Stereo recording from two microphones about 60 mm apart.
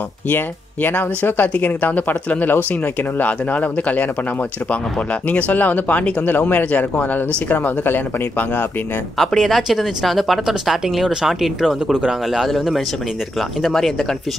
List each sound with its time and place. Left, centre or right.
0.8 s speech: left
5.3 s speech: left
9.2 s speech: centre